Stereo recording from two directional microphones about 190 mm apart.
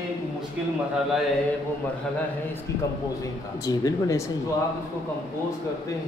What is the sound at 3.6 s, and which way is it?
Speech, 15° left (ahead or behind).